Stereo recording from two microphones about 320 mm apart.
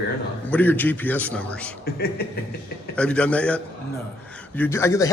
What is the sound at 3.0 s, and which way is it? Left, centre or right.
A man's voice, centre.